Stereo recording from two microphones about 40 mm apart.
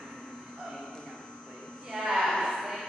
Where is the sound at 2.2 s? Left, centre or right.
Centre.